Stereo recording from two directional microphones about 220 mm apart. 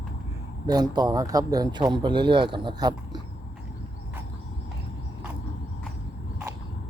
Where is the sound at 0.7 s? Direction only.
20° right (ahead or behind).